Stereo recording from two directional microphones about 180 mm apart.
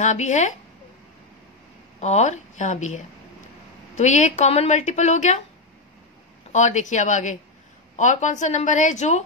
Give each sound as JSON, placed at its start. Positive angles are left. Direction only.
{"t": 0.0, "sound": "speech", "side_deg": 40}
{"t": 2.0, "sound": "speech", "side_deg": 40}
{"t": 6.5, "sound": "speech", "side_deg": 40}